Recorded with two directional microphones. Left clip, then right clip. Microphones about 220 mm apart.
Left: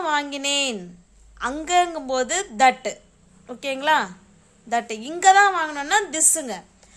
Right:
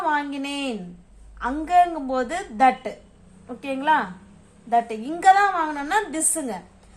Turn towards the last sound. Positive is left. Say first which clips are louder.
# left 3 dB
turn(degrees=45)  # may be behind; listen again after turning